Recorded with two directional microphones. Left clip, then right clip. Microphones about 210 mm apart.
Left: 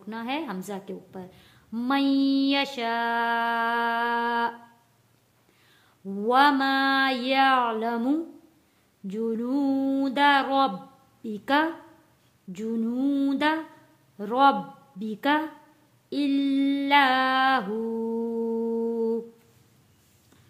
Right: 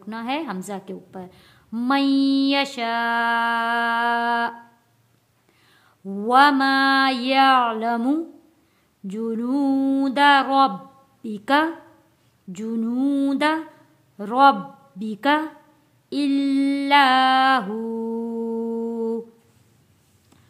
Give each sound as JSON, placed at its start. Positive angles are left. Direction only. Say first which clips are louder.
{"t": 0.0, "sound": "a woman's voice", "louder": "right 4 dB", "side_deg": -20}
{"t": 5.7, "sound": "a woman's voice", "louder": "right 3 dB", "side_deg": -20}
{"t": 9.0, "sound": "a sound", "louder": "right 2 dB", "side_deg": -20}
{"t": 11.2, "sound": "a woman's voice", "louder": "right 4 dB", "side_deg": -20}
{"t": 12.5, "sound": "a sound", "louder": "right 3 dB", "side_deg": -20}
{"t": 14.1, "sound": "speech", "louder": "right 5 dB", "side_deg": -20}
{"t": 16.1, "sound": "mantra", "louder": "right 4 dB", "side_deg": -20}